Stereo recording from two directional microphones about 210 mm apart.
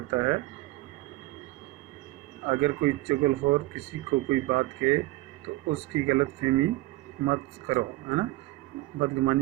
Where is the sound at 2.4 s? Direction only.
30° right (ahead or behind).